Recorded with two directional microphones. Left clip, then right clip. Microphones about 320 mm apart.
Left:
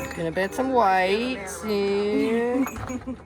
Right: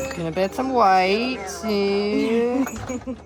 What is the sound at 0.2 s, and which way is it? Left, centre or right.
Speech, right.